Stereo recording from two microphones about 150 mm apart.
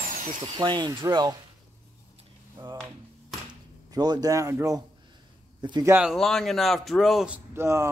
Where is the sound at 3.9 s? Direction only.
25° right (ahead or behind).